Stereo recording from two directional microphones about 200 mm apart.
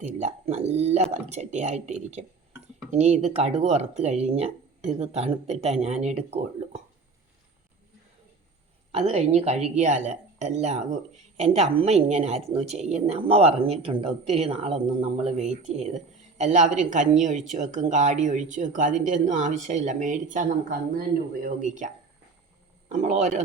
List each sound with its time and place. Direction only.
0.0 s speech: 35° right (ahead or behind)
8.9 s speech: 30° right (ahead or behind)